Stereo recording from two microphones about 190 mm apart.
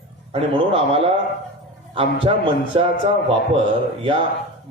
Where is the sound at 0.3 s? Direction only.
30° right (ahead or behind).